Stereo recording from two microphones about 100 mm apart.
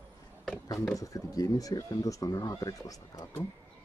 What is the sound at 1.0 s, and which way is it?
Speech, 35° left (ahead or behind).